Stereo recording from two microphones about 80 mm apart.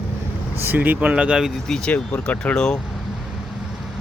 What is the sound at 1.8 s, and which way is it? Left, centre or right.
Speech, centre.